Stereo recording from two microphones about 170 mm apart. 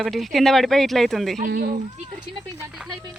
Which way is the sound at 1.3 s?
60° right (ahead or behind).